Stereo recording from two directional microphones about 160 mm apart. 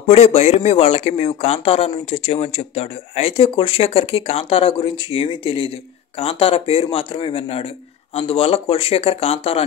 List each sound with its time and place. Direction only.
0.1 s speech: 40° left (ahead or behind)